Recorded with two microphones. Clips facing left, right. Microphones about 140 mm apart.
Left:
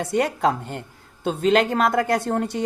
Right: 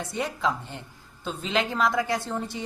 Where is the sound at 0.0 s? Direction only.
65° left (ahead or behind).